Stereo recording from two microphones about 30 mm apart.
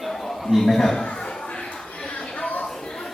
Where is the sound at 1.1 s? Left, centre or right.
Left.